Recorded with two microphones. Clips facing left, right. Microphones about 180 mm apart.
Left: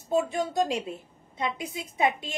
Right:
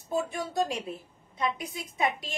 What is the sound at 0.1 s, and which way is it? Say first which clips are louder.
Speech: left 4 dB; 20° left (ahead or behind).